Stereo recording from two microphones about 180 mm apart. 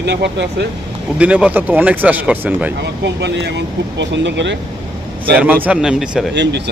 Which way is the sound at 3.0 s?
75° right (ahead or behind).